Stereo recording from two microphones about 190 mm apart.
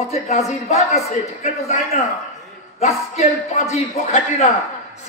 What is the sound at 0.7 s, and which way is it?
Speech, 35° left (ahead or behind).